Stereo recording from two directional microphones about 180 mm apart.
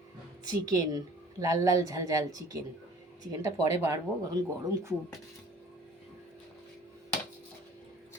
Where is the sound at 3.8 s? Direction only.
20° right (ahead or behind).